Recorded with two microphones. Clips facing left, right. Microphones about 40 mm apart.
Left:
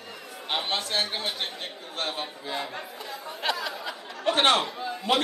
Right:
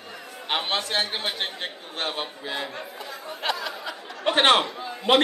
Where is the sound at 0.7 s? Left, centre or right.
Centre.